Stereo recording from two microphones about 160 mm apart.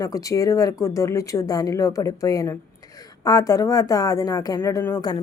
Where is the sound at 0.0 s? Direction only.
20° left (ahead or behind).